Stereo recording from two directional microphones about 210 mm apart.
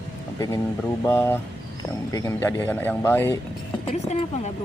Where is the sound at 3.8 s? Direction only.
30° left (ahead or behind).